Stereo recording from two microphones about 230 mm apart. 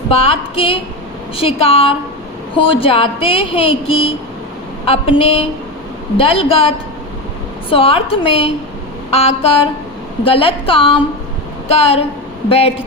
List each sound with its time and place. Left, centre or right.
0.1 s speech: left